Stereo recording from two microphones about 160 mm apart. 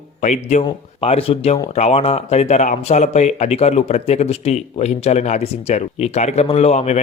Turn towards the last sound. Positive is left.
turn(degrees=45)  # may be behind; listen again after turning